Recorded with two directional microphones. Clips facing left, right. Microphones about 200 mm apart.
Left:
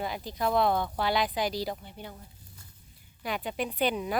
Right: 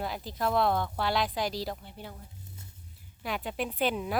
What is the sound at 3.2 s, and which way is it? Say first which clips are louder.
Speech: left 1 dB; centre (ahead or behind).